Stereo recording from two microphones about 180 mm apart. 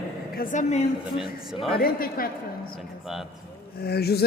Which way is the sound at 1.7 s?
55° left (ahead or behind).